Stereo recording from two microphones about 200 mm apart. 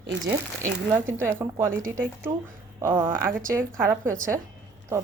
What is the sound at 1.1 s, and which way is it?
Speech, 10° right (ahead or behind).